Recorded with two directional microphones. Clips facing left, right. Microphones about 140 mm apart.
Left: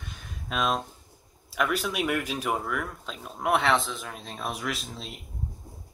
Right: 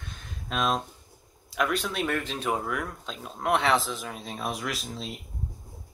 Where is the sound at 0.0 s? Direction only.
Centre (ahead or behind).